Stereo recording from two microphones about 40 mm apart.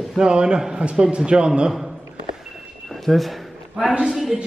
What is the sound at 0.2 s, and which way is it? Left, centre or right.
A man's voice, right.